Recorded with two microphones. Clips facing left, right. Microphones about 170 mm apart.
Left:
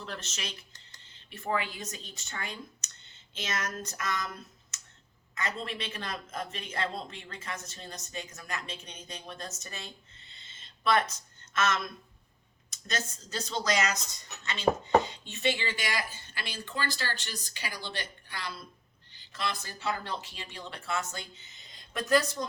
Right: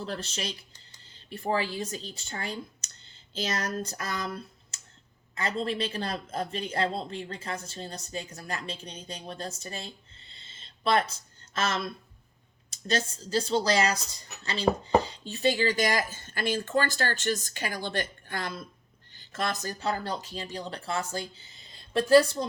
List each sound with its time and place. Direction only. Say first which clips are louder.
0.0 s speech: right 6 dB; 35° right (ahead or behind)